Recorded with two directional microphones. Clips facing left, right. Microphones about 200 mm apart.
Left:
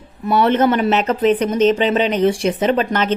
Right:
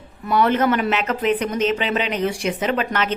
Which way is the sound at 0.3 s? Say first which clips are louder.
Left 3 dB; 30° left (ahead or behind).